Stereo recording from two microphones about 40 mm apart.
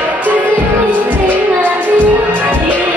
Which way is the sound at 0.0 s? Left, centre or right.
Right.